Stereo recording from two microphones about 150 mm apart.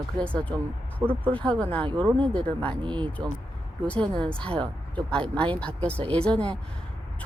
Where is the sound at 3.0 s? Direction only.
10° left (ahead or behind).